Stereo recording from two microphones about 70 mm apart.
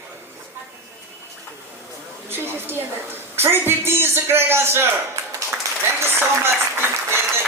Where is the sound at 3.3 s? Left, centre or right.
Right.